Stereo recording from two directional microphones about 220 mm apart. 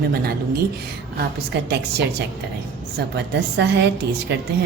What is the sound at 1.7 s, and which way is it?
A woman's voice, 50° right (ahead or behind).